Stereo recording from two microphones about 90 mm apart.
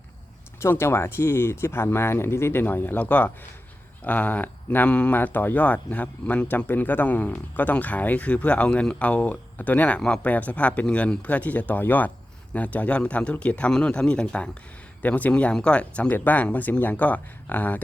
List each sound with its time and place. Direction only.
0.6 s speech: 25° left (ahead or behind)